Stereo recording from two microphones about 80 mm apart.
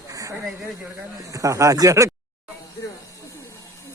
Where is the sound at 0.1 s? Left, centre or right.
Right.